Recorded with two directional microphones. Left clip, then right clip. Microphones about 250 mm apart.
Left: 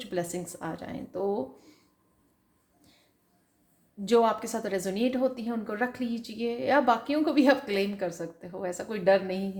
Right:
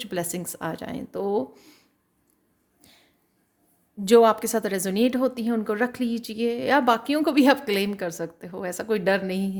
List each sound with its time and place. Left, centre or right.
0.0 s a woman's voice: right
4.0 s a woman's voice: right